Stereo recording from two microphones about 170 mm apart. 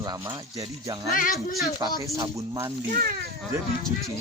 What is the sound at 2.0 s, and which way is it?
Speech, 20° right (ahead or behind).